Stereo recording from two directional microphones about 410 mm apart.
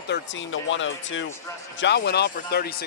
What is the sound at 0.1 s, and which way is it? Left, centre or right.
A man's voice, left.